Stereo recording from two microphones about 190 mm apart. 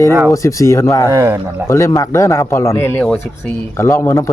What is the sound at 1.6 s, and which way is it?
A man's voice, 15° left (ahead or behind).